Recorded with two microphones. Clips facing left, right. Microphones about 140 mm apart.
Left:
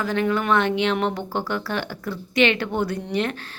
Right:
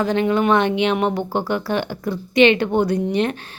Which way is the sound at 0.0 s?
20° right (ahead or behind).